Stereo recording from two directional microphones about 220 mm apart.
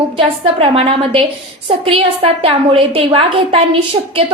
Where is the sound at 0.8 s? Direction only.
25° right (ahead or behind).